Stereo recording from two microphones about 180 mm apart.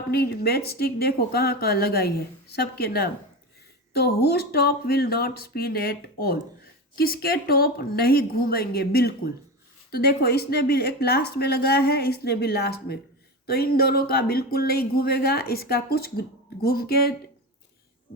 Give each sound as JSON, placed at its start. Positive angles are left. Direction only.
{"t": 0.1, "sound": "speech", "side_deg": 65}